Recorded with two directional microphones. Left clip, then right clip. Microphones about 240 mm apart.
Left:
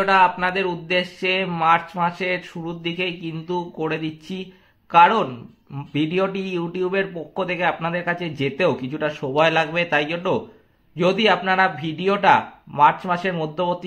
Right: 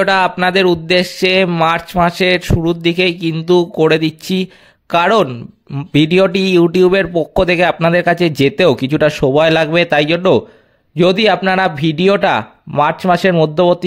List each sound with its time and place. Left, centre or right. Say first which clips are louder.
0.0 s speech: right 4 dB; right